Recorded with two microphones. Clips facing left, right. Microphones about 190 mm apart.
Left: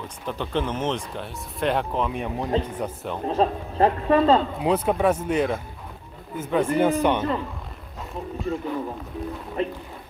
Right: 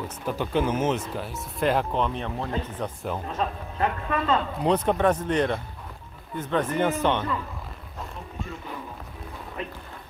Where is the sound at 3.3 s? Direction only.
35° left (ahead or behind).